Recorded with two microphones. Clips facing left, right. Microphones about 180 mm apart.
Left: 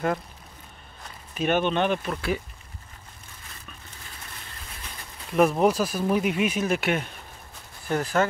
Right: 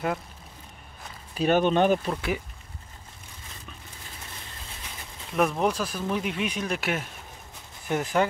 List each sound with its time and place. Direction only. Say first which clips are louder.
1.3 s speech: right 2 dB; 35° right (ahead or behind)
2.0 s speech: left 1 dB; 20° right (ahead or behind)
5.3 s speech: left 4 dB; 5° left (ahead or behind)
7.9 s speech: left 1 dB; 20° right (ahead or behind)